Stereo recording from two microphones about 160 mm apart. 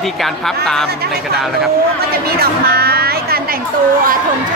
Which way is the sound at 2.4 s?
75° right (ahead or behind).